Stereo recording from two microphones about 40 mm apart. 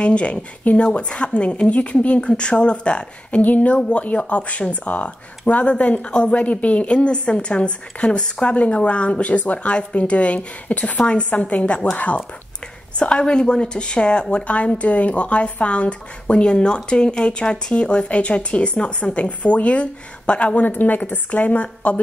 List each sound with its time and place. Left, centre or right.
0.0 s speech: left
3.3 s a woman's voice: left
6.0 s a woman's voice: left
13.0 s a woman's voice: left
20.6 s a woman's voice: left